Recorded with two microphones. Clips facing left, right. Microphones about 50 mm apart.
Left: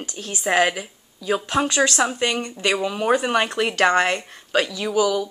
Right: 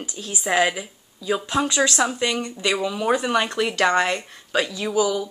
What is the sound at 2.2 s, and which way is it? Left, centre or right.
Speech, left.